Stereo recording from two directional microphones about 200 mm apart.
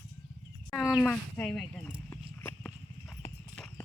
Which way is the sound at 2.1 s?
10° left (ahead or behind).